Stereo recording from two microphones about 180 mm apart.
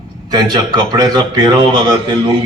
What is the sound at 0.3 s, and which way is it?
A man's voice, 25° right (ahead or behind).